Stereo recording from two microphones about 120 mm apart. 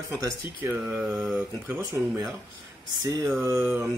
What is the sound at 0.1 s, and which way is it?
Speech, 20° right (ahead or behind).